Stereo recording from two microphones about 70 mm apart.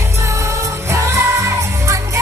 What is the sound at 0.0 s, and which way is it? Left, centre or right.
Music, right.